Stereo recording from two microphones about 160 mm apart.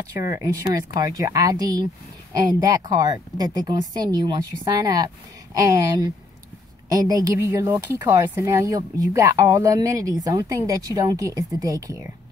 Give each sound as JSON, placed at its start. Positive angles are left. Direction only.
{"t": 0.2, "sound": "speech", "side_deg": -20}